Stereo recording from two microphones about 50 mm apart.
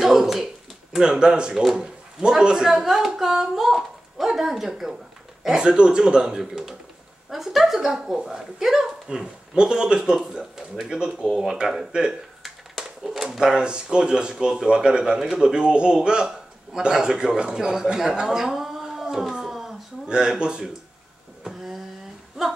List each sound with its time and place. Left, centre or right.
0.0 s a sound: centre
0.9 s speech: centre
20.1 s speech: centre
22.4 s speech: centre